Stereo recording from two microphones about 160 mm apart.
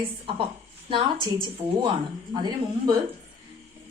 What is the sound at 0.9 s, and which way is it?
A woman's voice, 30° right (ahead or behind).